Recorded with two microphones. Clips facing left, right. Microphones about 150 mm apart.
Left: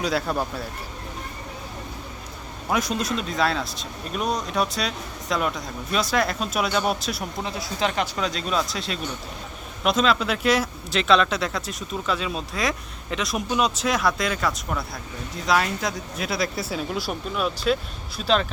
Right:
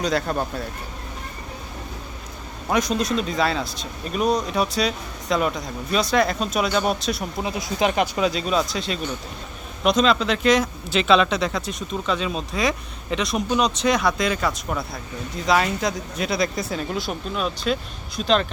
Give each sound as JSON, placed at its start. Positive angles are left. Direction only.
{"t": 0.0, "sound": "speech", "side_deg": 5}
{"t": 2.6, "sound": "speech", "side_deg": 0}
{"t": 7.4, "sound": "speech", "side_deg": -15}